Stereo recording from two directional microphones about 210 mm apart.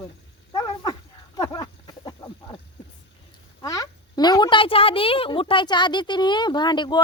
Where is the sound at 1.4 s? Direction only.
15° left (ahead or behind).